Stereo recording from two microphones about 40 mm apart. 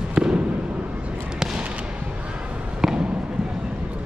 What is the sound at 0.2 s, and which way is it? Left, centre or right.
Fireworks, centre.